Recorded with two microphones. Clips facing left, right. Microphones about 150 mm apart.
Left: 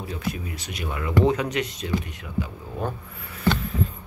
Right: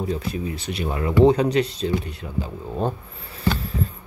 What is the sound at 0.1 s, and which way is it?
Speech, 30° right (ahead or behind).